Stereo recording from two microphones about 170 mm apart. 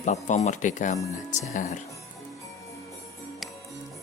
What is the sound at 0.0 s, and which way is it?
Speech, 45° left (ahead or behind).